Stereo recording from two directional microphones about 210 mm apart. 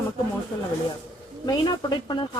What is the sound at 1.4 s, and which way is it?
Speech, 20° left (ahead or behind).